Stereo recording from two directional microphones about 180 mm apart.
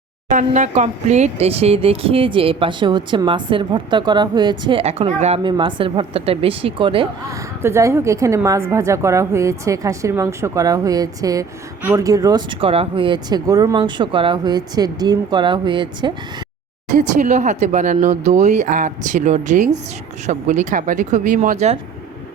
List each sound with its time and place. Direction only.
0.3 s speech: 45° right (ahead or behind)
5.4 s a woman's voice: 25° right (ahead or behind)
7.3 s a woman's voice: 15° right (ahead or behind)
17.0 s a woman's voice: 40° right (ahead or behind)